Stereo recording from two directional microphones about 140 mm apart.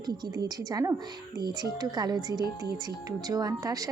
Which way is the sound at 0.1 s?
25° right (ahead or behind).